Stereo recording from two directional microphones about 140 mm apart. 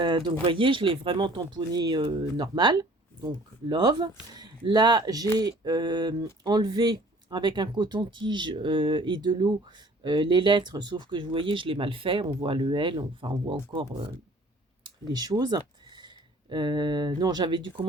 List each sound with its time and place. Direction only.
0.0 s speech: 35° right (ahead or behind)
14.8 s speech: 30° right (ahead or behind)